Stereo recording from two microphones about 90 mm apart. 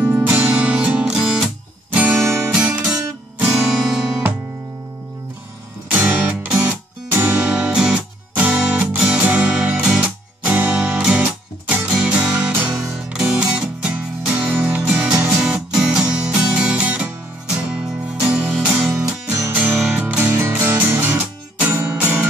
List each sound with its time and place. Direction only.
0.0 s music: 20° right (ahead or behind)
1.9 s music: 20° right (ahead or behind)
2.2 s music: 35° right (ahead or behind)
2.5 s music: 20° right (ahead or behind)
3.5 s music: 5° right (ahead or behind)
5.9 s music: 20° right (ahead or behind)